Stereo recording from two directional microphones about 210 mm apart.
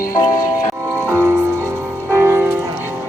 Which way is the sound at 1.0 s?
10° right (ahead or behind).